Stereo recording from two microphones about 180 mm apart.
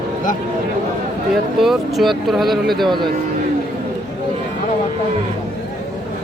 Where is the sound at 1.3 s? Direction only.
Centre (ahead or behind).